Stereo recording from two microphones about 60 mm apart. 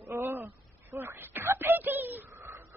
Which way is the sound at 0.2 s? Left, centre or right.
Right.